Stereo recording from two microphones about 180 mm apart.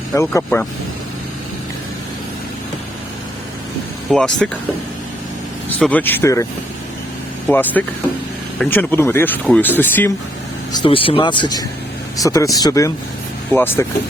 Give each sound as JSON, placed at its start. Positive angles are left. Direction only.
{"t": 0.1, "sound": "speech", "side_deg": 15}
{"t": 4.1, "sound": "speech", "side_deg": 5}
{"t": 5.6, "sound": "speech", "side_deg": 10}
{"t": 10.7, "sound": "speech", "side_deg": 25}